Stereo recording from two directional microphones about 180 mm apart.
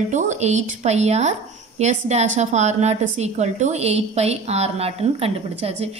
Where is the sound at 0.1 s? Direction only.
40° right (ahead or behind).